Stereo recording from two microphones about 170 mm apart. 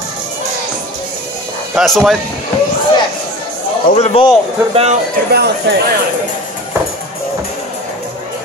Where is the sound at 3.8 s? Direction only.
40° left (ahead or behind).